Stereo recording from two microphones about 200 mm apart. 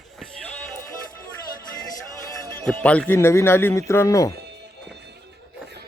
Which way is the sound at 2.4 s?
10° left (ahead or behind).